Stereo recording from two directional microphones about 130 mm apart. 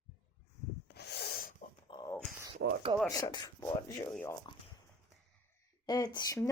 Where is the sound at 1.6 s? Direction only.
50° left (ahead or behind).